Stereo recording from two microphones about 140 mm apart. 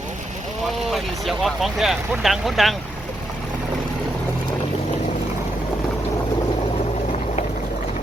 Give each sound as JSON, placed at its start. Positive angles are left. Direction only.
{"t": 0.9, "sound": "speech", "side_deg": 0}